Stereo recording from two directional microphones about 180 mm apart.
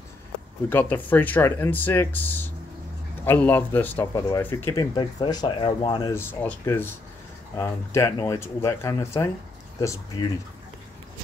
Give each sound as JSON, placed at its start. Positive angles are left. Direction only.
{"t": 0.7, "sound": "speech", "side_deg": 10}
{"t": 6.1, "sound": "speech", "side_deg": 15}